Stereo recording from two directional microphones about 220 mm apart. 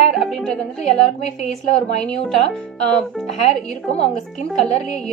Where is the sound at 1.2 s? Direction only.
30° left (ahead or behind).